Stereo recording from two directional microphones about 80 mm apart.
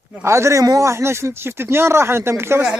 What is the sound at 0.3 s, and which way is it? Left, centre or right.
Speech, right.